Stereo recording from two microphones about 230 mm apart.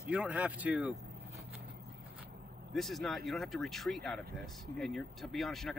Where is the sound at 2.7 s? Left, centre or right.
Centre.